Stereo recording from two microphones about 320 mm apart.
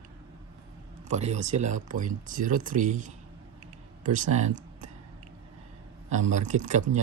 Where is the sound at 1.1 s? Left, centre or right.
Right.